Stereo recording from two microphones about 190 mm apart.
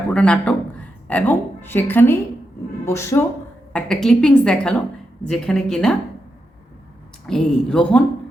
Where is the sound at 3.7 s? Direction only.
5° left (ahead or behind).